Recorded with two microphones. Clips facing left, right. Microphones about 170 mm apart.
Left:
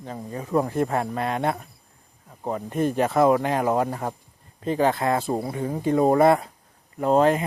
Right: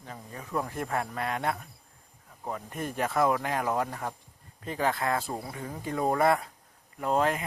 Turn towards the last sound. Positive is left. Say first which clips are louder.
# left 8 dB
turn(degrees=30)  # may be behind; listen again after turning